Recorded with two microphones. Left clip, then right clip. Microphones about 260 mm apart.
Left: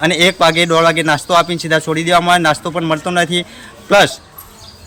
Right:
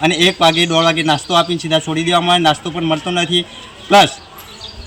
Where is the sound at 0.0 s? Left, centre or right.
Centre.